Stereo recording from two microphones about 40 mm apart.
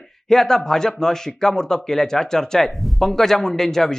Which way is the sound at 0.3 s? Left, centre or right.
Centre.